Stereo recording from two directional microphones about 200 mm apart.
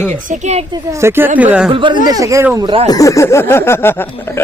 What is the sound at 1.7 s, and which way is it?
Speech, 25° right (ahead or behind).